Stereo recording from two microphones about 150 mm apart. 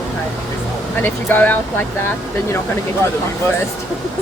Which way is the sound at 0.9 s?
10° left (ahead or behind).